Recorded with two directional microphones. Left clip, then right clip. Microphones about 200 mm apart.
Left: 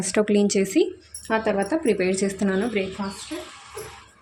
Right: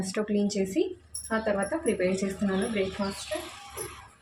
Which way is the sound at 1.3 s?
55° left (ahead or behind).